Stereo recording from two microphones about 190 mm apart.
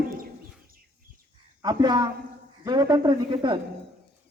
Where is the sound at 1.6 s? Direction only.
20° right (ahead or behind).